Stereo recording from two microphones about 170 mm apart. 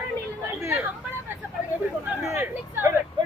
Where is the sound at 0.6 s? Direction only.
15° right (ahead or behind).